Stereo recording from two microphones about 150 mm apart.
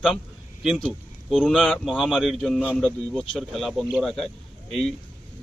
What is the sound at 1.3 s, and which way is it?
Speech, centre (ahead or behind).